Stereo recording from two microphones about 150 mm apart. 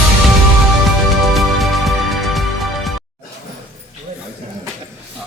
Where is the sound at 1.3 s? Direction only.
Centre (ahead or behind).